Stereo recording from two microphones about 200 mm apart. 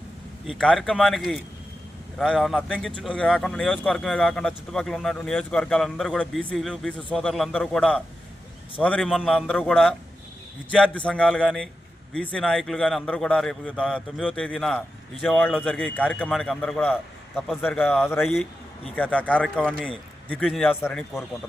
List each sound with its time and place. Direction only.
0.4 s a man's voice: 5° left (ahead or behind)
18.2 s a man's voice: centre (ahead or behind)